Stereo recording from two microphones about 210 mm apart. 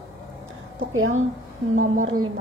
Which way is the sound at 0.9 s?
80° right.